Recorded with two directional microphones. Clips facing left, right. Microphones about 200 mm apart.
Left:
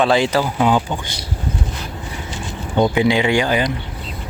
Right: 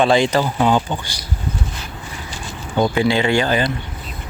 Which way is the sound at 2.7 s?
20° left (ahead or behind).